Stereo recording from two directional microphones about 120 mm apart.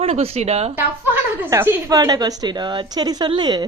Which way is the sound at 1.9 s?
30° right (ahead or behind).